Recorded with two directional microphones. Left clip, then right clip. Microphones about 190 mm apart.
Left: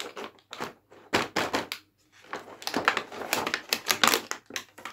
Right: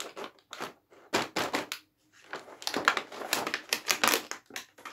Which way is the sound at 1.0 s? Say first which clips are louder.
Left 3 dB; 10° left (ahead or behind).